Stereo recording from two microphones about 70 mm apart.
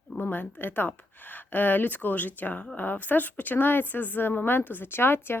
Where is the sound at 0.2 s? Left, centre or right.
Left.